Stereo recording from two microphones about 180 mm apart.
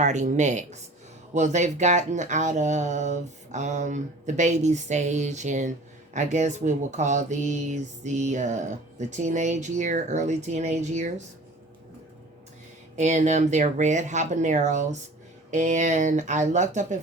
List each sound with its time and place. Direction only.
0.0 s speech: 40° right (ahead or behind)
13.0 s speech: 40° right (ahead or behind)